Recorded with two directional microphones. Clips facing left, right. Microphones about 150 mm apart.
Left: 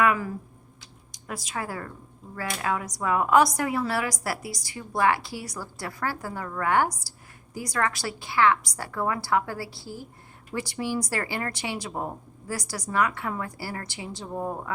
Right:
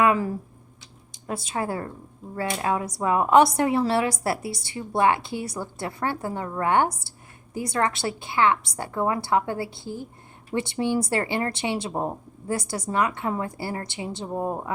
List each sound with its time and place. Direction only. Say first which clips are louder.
0.0 s a woman's voice: right 3 dB; 30° right (ahead or behind)